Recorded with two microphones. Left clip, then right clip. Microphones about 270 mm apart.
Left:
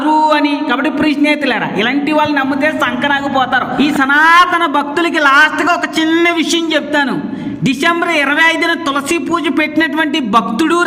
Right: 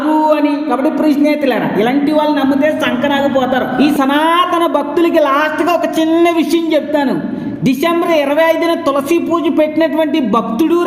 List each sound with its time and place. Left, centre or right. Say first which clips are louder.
3.3 s a man's voice: even; centre
4.0 s a woman's voice: left 7 dB; left
7.9 s a woman's voice: even; left
9.6 s a woman's voice: right 2 dB; left